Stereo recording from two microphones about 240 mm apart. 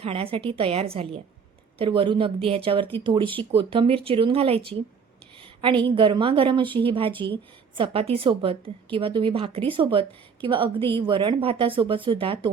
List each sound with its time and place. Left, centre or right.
0.0 s a woman's voice: right